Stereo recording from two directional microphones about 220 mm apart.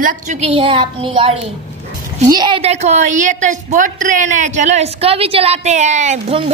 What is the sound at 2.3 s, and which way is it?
A woman's voice, 20° right (ahead or behind).